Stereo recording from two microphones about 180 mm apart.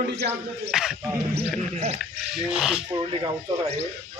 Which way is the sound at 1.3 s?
35° right (ahead or behind).